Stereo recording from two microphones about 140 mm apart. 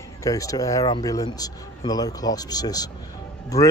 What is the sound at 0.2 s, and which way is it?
Speech, 25° left (ahead or behind).